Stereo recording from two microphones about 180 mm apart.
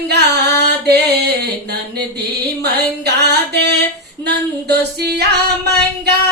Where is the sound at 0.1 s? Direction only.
65° right (ahead or behind).